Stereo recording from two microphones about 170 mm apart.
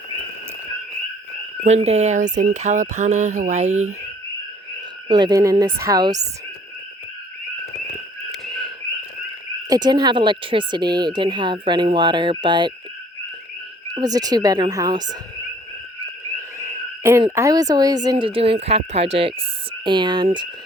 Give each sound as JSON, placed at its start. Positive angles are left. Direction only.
{"t": 1.6, "sound": "speech", "side_deg": -40}
{"t": 5.0, "sound": "speech", "side_deg": -25}
{"t": 8.3, "sound": "a sound", "side_deg": 0}
{"t": 9.6, "sound": "speech", "side_deg": -25}
{"t": 13.9, "sound": "speech", "side_deg": -25}
{"t": 16.6, "sound": "owl", "side_deg": -15}
{"t": 17.3, "sound": "speech", "side_deg": -20}